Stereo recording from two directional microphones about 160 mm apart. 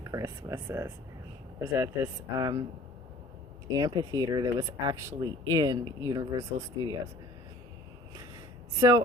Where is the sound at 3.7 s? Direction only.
25° right (ahead or behind).